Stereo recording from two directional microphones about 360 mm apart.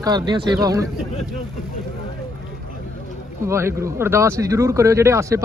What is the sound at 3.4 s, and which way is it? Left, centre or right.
Speech, centre.